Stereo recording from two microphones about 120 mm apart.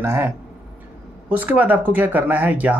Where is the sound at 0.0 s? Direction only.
20° right (ahead or behind).